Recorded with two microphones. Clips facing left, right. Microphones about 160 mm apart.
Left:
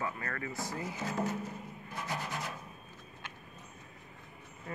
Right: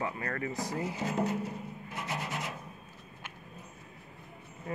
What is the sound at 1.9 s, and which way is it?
Rub, 5° right (ahead or behind).